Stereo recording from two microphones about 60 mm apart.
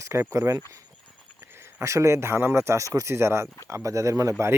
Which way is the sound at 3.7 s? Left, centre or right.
Right.